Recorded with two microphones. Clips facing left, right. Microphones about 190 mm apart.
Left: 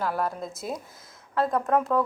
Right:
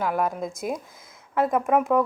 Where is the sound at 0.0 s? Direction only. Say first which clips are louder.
Right 3 dB; 15° right (ahead or behind).